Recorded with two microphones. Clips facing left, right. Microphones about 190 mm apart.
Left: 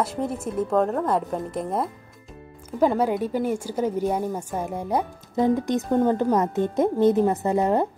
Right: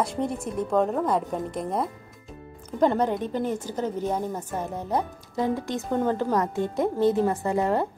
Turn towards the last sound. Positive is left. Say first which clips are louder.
# left 3 dB
turn(degrees=20)  # may be behind; listen again after turning